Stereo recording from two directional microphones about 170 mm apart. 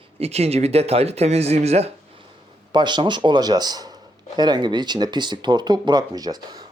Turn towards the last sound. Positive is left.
turn(degrees=-25)  # may be behind; listen again after turning